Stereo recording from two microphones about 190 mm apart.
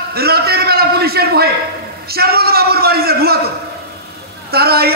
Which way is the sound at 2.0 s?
55° right (ahead or behind).